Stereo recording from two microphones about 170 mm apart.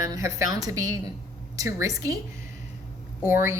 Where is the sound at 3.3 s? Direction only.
20° right (ahead or behind).